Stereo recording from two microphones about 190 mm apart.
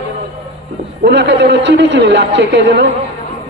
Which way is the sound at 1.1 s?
70° right (ahead or behind).